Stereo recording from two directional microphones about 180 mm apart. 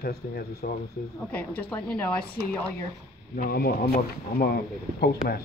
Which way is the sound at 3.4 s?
55° left (ahead or behind).